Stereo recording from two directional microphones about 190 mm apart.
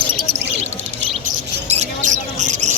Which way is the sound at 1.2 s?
35° right (ahead or behind).